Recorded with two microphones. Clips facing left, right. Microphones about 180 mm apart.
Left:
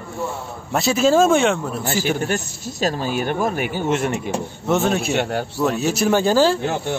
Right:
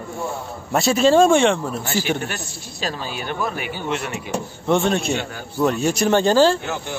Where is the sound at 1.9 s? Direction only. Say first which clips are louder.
Left 4 dB; 45° left (ahead or behind).